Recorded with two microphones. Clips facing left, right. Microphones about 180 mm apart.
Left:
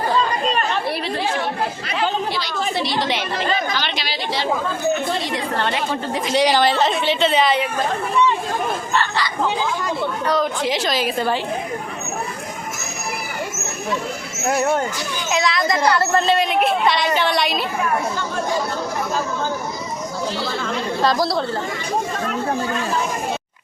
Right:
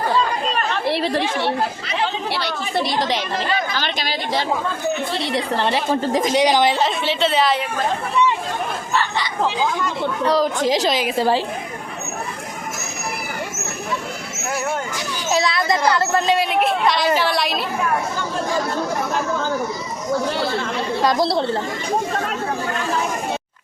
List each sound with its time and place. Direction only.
2.3 s a woman's voice: 55° right (ahead or behind)
5.2 s a woman's voice: 30° right (ahead or behind)
6.3 s a woman's voice: 15° right (ahead or behind)
7.0 s speech: centre (ahead or behind)
10.2 s a woman's voice: 35° right (ahead or behind)
10.8 s a woman's voice: 15° right (ahead or behind)
15.3 s a child's voice: 30° right (ahead or behind)
16.0 s speech: 10° right (ahead or behind)
21.0 s speech: 20° right (ahead or behind)